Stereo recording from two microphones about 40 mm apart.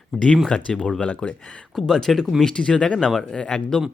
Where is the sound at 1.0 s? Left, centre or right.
Left.